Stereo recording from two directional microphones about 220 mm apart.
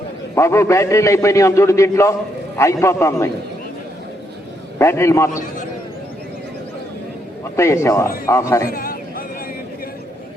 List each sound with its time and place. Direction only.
0.3 s a man's voice: 10° left (ahead or behind)
4.8 s a man's voice: 10° left (ahead or behind)
7.5 s a man's voice: 10° left (ahead or behind)
8.6 s a sound: 40° left (ahead or behind)